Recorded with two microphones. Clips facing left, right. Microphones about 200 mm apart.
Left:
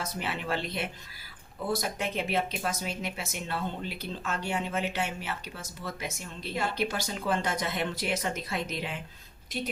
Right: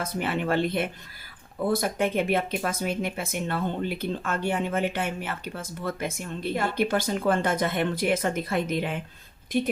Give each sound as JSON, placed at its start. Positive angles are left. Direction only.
{"t": 0.0, "sound": "speech", "side_deg": -55}